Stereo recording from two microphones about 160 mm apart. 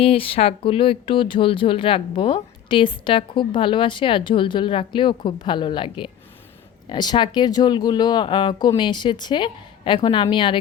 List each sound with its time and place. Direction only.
0.0 s speech: 35° left (ahead or behind)